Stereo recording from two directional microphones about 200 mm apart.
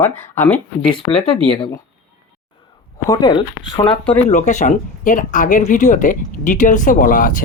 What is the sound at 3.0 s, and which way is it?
Speech, 20° left (ahead or behind).